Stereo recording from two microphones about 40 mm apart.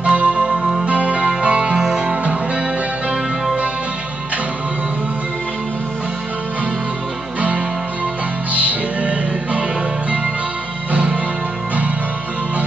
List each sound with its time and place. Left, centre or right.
0.0 s music: right
8.5 s music: right
10.9 s music: right